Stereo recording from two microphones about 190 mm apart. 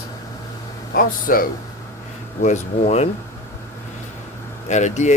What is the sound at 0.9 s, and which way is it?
Speech, 50° left (ahead or behind).